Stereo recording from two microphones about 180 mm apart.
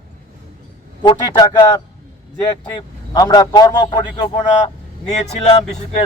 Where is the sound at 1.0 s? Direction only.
25° left (ahead or behind).